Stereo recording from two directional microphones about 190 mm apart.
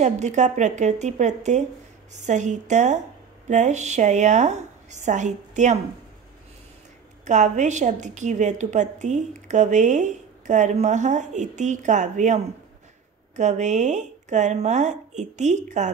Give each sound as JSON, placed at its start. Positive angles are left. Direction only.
{"t": 0.0, "sound": "a woman's voice", "side_deg": -40}
{"t": 7.2, "sound": "a woman's voice", "side_deg": -40}
{"t": 13.4, "sound": "a woman's voice", "side_deg": -40}